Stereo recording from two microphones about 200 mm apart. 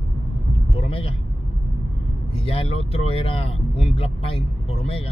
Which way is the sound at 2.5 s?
30° left (ahead or behind).